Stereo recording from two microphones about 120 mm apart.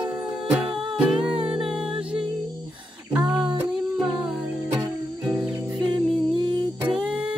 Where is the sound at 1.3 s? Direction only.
50° right (ahead or behind).